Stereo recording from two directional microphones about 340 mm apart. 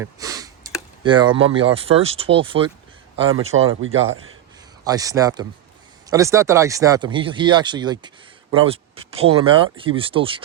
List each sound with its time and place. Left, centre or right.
0.0 s a sound: centre
1.5 s speech: centre
3.2 s speech: right
4.9 s speech: centre